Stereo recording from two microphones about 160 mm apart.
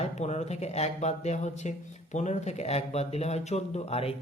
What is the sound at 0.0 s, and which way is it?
Speech, 45° left (ahead or behind).